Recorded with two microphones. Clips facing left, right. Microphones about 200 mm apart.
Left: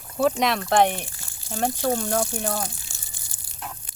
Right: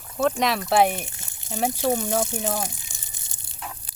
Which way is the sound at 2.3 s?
20° right (ahead or behind).